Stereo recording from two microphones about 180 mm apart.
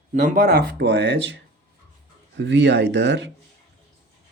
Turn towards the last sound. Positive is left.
turn(degrees=-75)  # may be behind; listen again after turning